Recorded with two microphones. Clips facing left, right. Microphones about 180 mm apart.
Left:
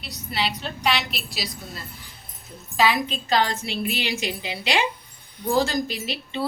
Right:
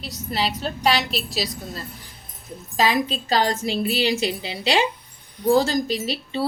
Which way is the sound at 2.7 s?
40° right (ahead or behind).